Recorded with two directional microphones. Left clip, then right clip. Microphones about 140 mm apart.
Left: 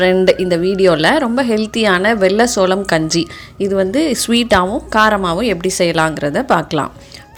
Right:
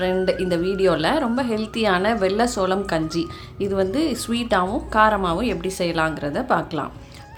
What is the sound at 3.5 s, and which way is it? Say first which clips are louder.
A woman's voice: left 7 dB; 30° left (ahead or behind).